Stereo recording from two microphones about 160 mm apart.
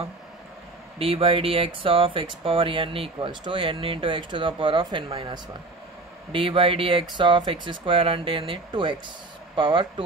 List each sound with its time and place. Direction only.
0.9 s speech: 35° right (ahead or behind)